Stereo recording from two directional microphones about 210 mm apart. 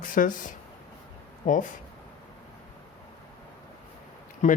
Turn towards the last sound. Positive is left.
turn(degrees=35)  # may be behind; listen again after turning